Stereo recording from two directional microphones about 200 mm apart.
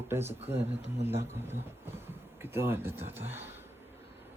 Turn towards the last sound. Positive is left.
turn(degrees=-10)  # may be behind; listen again after turning